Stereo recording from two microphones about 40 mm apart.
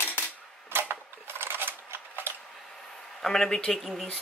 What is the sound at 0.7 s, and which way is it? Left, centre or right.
Typewriter, right.